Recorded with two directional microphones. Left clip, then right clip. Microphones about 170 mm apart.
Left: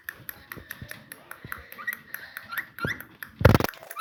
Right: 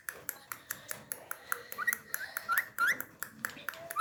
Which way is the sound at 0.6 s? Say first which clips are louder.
Left 3 dB; 40° right (ahead or behind).